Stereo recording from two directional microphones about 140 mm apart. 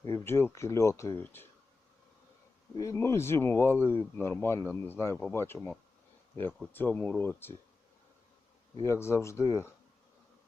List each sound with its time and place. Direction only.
0.0 s speech: 20° left (ahead or behind)
2.7 s speech: 20° left (ahead or behind)
5.5 s speech: centre (ahead or behind)
6.7 s speech: 15° left (ahead or behind)
8.8 s speech: 20° left (ahead or behind)